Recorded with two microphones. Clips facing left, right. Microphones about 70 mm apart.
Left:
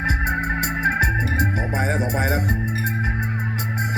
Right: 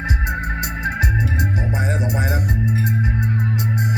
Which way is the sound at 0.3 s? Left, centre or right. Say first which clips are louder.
Left 2 dB; left.